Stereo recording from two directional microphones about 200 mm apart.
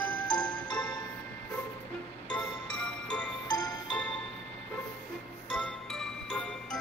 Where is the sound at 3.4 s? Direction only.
20° left (ahead or behind).